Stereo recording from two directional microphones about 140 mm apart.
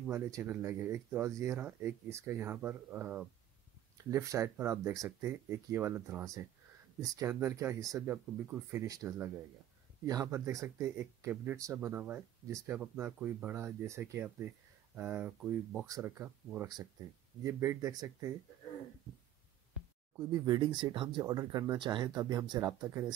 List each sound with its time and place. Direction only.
0.1 s speech: 20° right (ahead or behind)
4.0 s speech: 25° right (ahead or behind)
12.7 s speech: 10° right (ahead or behind)
20.4 s speech: 30° right (ahead or behind)
21.2 s speech: 25° right (ahead or behind)